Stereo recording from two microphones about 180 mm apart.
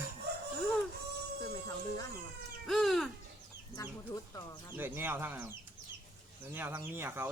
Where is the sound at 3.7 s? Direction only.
20° left (ahead or behind).